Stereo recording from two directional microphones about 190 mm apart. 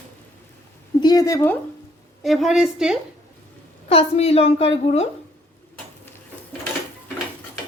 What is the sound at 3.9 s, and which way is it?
A woman's voice, 30° left (ahead or behind).